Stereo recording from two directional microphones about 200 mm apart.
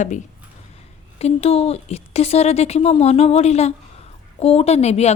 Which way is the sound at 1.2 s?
30° left (ahead or behind).